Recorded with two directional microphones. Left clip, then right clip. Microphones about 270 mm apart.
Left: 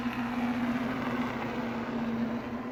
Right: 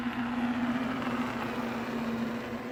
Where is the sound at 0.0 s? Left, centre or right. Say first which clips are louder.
Even; left.